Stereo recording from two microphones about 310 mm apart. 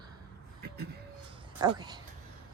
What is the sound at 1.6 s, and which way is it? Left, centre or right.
Speech, centre.